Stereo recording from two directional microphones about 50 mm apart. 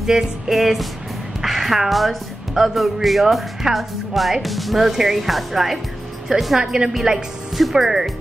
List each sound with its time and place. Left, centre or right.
0.0 s speech: centre
6.6 s speech: centre
6.9 s speech: centre